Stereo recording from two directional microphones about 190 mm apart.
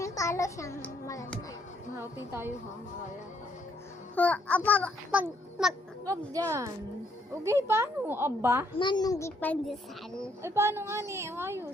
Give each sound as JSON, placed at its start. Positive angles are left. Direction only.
{"t": 0.0, "sound": "a child's voice", "side_deg": 15}
{"t": 4.1, "sound": "a child's voice", "side_deg": 10}
{"t": 5.1, "sound": "a child's voice", "side_deg": -5}
{"t": 6.1, "sound": "a woman's voice", "side_deg": -15}
{"t": 8.8, "sound": "a child's voice", "side_deg": 20}
{"t": 10.4, "sound": "a woman's voice", "side_deg": -15}